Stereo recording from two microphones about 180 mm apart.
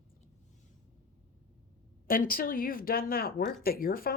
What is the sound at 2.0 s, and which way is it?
Speech, 50° left (ahead or behind).